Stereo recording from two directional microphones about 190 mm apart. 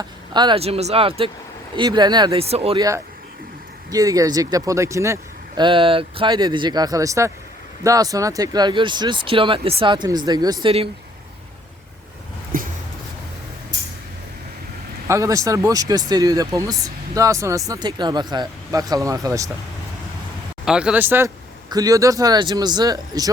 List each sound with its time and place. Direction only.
0.0 s speech: 25° right (ahead or behind)
3.9 s speech: 20° right (ahead or behind)
12.5 s a sound: 45° right (ahead or behind)
15.0 s speech: 15° right (ahead or behind)
20.7 s speech: 5° right (ahead or behind)